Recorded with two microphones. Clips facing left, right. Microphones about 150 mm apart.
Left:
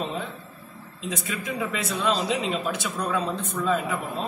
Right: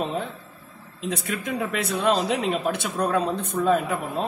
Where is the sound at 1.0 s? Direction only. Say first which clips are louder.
Right 3 dB; 60° right (ahead or behind).